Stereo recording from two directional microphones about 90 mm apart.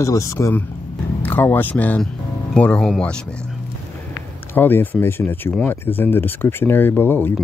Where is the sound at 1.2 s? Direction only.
20° left (ahead or behind).